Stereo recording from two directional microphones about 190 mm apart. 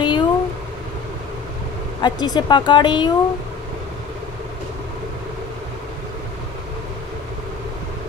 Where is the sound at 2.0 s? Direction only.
20° left (ahead or behind).